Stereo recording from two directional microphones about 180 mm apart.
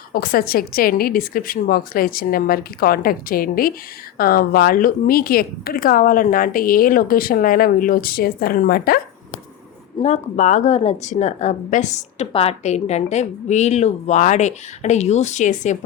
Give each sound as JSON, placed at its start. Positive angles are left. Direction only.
{"t": 0.1, "sound": "a woman's voice", "side_deg": 55}
{"t": 10.0, "sound": "speech", "side_deg": 40}